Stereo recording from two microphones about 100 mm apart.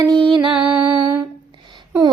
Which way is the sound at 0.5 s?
10° right (ahead or behind).